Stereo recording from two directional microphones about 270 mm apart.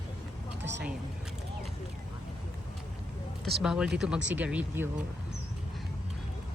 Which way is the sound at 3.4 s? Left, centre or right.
Centre.